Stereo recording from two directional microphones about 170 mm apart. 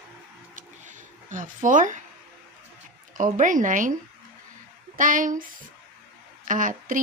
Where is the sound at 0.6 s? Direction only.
50° right (ahead or behind).